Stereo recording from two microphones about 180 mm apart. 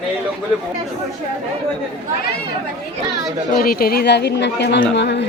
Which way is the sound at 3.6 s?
55° left (ahead or behind).